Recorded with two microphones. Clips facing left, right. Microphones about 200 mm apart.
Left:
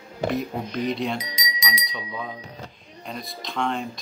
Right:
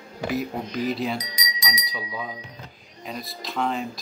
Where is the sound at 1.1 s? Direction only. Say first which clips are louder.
Left 1 dB; 25° left (ahead or behind).